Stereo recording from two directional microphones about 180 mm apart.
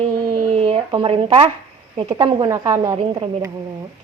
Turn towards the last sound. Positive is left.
turn(degrees=-25)  # may be behind; listen again after turning